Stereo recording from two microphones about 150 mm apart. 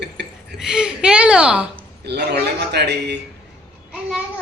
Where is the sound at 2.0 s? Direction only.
90° right.